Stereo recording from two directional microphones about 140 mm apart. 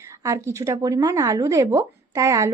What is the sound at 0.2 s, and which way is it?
Speech, 20° right (ahead or behind).